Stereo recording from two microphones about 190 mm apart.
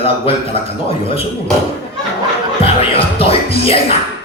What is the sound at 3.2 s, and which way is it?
Speech, 30° left (ahead or behind).